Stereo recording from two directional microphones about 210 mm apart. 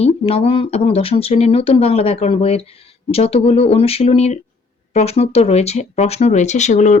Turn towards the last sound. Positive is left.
turn(degrees=35)  # may be behind; listen again after turning